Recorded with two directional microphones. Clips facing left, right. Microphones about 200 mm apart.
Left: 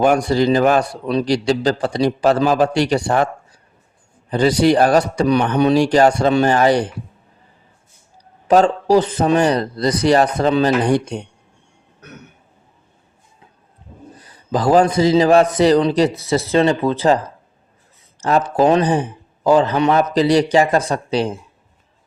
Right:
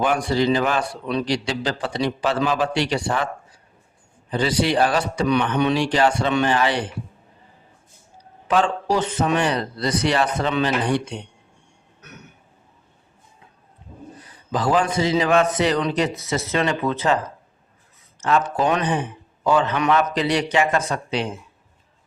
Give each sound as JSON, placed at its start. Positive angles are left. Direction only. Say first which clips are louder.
{"t": 0.0, "sound": "a man's voice", "louder": "left 5 dB", "side_deg": 40}
{"t": 4.3, "sound": "a man's voice", "louder": "left 7 dB", "side_deg": 45}
{"t": 8.4, "sound": "a man's voice", "louder": "left 7 dB", "side_deg": 40}
{"t": 14.2, "sound": "a man's voice", "louder": "left 5 dB", "side_deg": 40}
{"t": 18.2, "sound": "a man's voice", "louder": "left 5 dB", "side_deg": 35}